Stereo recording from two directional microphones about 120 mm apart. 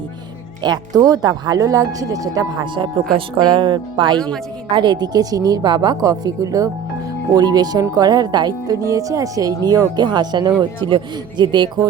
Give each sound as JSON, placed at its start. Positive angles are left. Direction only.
{"t": 0.6, "sound": "speech", "side_deg": -35}